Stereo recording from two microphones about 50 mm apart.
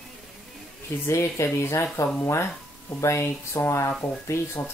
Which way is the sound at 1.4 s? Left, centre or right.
Left.